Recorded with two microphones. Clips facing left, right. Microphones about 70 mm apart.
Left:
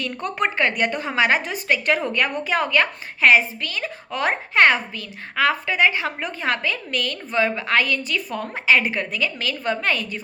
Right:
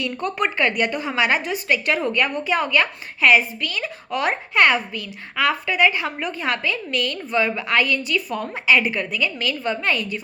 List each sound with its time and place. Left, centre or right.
0.0 s a woman's voice: left